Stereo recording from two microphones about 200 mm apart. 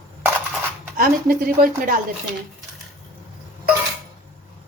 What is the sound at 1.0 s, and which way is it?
A woman's voice, 45° right (ahead or behind).